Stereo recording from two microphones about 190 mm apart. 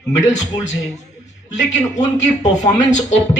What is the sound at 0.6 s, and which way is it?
Speech, 40° left (ahead or behind).